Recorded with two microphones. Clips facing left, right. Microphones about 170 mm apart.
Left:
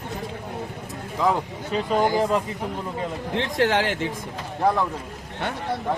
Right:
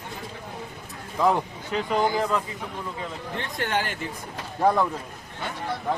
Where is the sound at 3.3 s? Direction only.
90° left.